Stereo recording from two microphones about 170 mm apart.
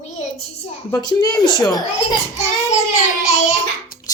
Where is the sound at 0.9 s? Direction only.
25° left (ahead or behind).